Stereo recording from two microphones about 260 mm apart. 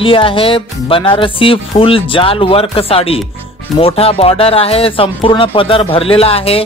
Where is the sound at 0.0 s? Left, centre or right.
Centre.